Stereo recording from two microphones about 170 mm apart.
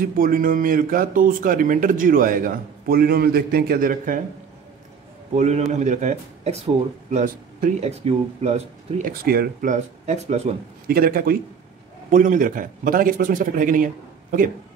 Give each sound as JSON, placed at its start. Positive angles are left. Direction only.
{"t": 0.0, "sound": "speech", "side_deg": -55}
{"t": 5.3, "sound": "speech", "side_deg": -40}
{"t": 9.0, "sound": "a man's voice", "side_deg": -60}
{"t": 10.9, "sound": "a man's voice", "side_deg": -60}